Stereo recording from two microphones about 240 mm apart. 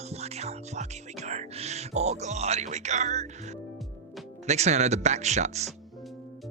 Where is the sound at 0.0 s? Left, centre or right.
Right.